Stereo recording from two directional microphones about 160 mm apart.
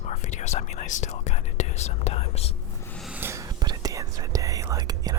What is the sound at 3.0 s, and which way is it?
Whispering, 10° right (ahead or behind).